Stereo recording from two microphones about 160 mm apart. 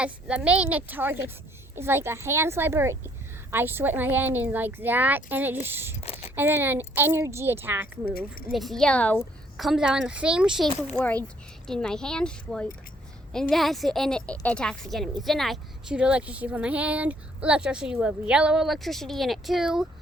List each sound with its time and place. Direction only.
0.0 s a woman's voice: 5° right (ahead or behind)
6.0 s a sound: 40° left (ahead or behind)
6.3 s a woman's voice: 15° right (ahead or behind)
8.5 s speech: centre (ahead or behind)